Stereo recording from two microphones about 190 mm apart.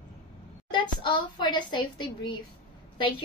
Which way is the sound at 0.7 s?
25° left (ahead or behind).